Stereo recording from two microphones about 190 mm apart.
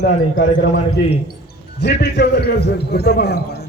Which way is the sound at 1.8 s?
65° left (ahead or behind).